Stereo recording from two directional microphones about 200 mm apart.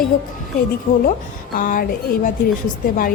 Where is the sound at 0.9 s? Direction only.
45° left (ahead or behind).